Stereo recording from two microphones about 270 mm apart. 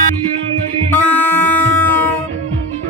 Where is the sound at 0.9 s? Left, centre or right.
Centre.